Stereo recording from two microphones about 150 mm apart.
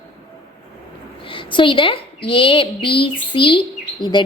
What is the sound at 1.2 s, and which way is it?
A woman's voice, 35° left (ahead or behind).